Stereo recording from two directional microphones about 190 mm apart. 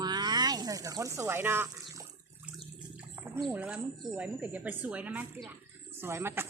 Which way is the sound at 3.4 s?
5° right (ahead or behind).